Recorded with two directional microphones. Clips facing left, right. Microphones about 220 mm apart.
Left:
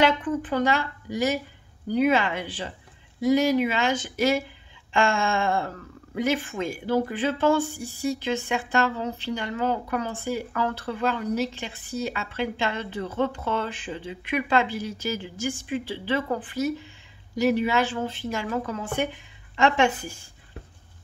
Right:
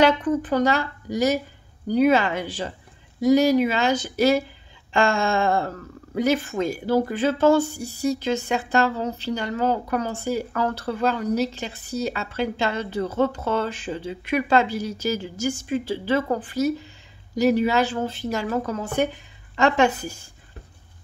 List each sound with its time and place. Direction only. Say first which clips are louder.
0.0 s speech: right 4 dB; 40° right (ahead or behind)